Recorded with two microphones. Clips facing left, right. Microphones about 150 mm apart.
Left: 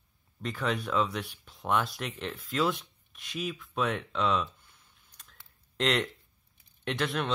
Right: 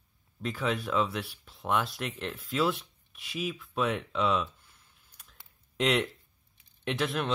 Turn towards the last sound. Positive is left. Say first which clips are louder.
# even
turn(degrees=-5)  # may be behind; listen again after turning